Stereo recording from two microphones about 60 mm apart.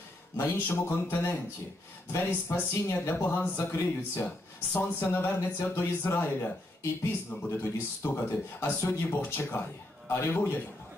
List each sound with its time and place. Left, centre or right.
0.4 s speech: left
6.8 s speech: left